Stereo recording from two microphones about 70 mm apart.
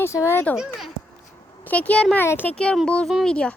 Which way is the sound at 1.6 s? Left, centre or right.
Left.